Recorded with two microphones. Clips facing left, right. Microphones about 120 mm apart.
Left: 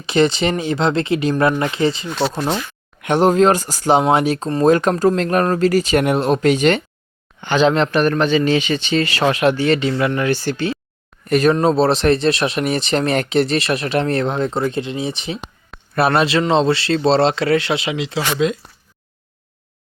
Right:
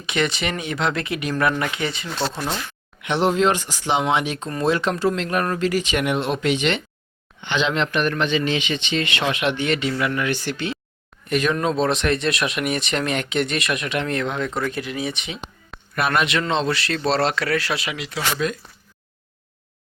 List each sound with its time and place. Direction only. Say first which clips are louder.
0.0 s speech: left 8 dB; 30° left (ahead or behind)
3.0 s speech: left 6 dB; 45° left (ahead or behind)
4.6 s speech: left 6 dB; 45° left (ahead or behind); by 18.6 s 25° left (ahead or behind)